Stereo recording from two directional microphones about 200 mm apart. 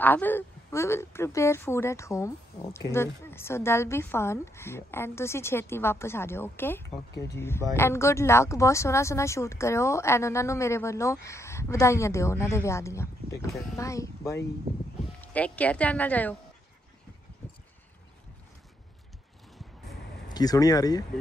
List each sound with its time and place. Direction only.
0.0 s a woman's voice: 10° left (ahead or behind)
17.4 s a sound: 10° left (ahead or behind)
20.3 s speech: 20° left (ahead or behind)